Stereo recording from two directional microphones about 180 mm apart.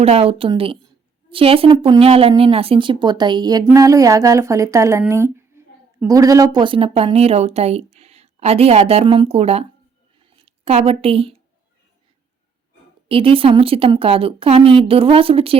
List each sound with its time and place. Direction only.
0.0 s a woman's voice: 35° right (ahead or behind)
13.1 s a woman's voice: 30° right (ahead or behind)